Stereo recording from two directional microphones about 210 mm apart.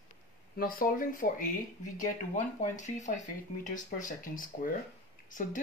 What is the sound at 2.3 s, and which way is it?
Speech, 35° left (ahead or behind).